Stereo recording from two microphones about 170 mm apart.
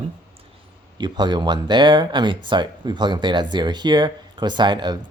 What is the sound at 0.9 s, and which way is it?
Speech, 25° right (ahead or behind).